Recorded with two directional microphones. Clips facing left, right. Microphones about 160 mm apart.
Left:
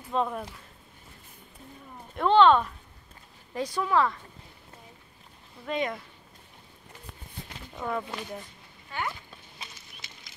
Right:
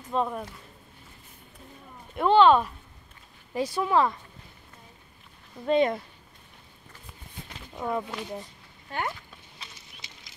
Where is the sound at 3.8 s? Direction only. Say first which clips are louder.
Right 1 dB; 20° right (ahead or behind).